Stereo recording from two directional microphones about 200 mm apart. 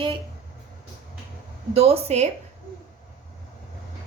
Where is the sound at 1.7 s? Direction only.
30° right (ahead or behind).